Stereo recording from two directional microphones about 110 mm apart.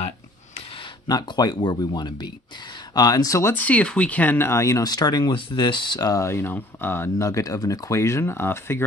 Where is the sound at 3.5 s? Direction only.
15° left (ahead or behind).